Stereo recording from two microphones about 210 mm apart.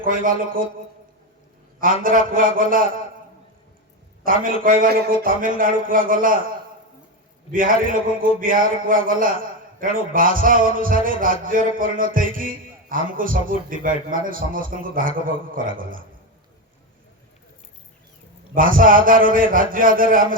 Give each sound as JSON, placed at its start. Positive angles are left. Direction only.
{"t": 0.0, "sound": "a man's voice", "side_deg": -40}
{"t": 1.8, "sound": "a man's voice", "side_deg": -40}
{"t": 4.2, "sound": "a man's voice", "side_deg": -40}
{"t": 7.5, "sound": "a man's voice", "side_deg": -40}
{"t": 18.5, "sound": "a man's voice", "side_deg": -40}